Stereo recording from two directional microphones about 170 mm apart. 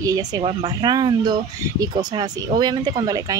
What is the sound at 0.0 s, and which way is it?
Speech, 20° right (ahead or behind).